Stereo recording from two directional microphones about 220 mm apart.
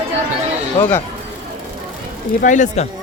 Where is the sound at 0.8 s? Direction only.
10° left (ahead or behind).